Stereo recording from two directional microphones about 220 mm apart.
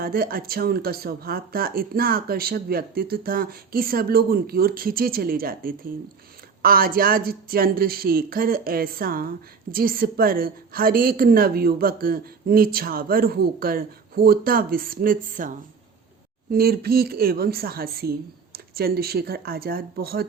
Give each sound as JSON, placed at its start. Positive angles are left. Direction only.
{"t": 0.0, "sound": "a woman's voice", "side_deg": -40}